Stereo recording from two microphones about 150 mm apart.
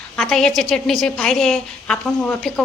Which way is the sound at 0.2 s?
5° left (ahead or behind).